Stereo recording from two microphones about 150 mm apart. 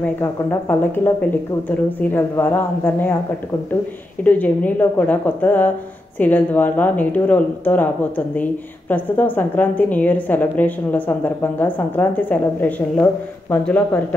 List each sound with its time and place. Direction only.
0.0 s a woman's voice: 15° left (ahead or behind)
4.2 s a woman's voice: 10° left (ahead or behind)